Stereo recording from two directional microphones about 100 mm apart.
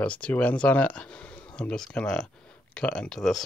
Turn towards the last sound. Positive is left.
turn(degrees=5)  # may be behind; listen again after turning